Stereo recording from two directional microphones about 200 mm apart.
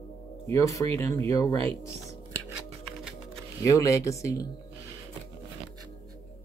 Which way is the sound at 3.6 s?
15° left (ahead or behind).